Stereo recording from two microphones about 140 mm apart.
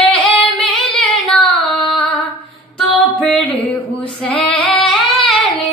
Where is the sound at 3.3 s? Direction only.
10° left (ahead or behind).